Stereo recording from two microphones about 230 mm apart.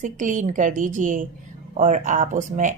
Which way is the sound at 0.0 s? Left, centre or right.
Right.